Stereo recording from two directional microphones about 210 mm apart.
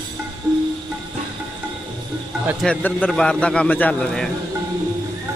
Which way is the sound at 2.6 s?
5° left (ahead or behind).